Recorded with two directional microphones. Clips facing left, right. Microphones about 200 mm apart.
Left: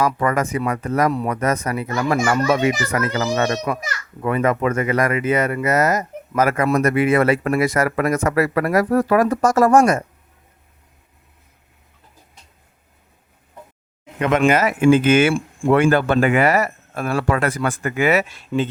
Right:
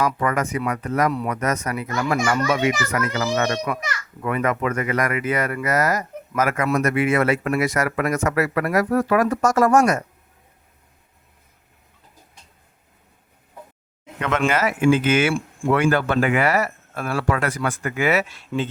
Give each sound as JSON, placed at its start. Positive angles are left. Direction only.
{"t": 0.0, "sound": "speech", "side_deg": 30}
{"t": 14.2, "sound": "speech", "side_deg": 15}
{"t": 14.8, "sound": "speech", "side_deg": 50}
{"t": 15.3, "sound": "speech", "side_deg": 30}
{"t": 17.5, "sound": "speech", "side_deg": 30}
{"t": 18.0, "sound": "speech", "side_deg": 15}